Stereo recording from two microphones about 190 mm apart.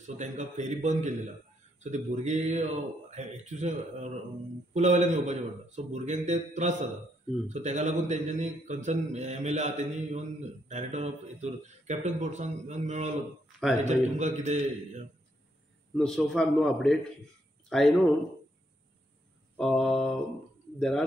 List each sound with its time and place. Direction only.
0.0 s a man's voice: 40° right (ahead or behind)
16.0 s a man's voice: centre (ahead or behind)
19.5 s a man's voice: centre (ahead or behind)